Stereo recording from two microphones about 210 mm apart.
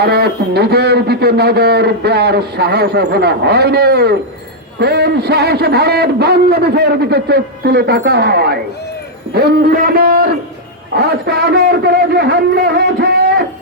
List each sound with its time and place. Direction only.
0.0 s a man's voice: 50° right (ahead or behind)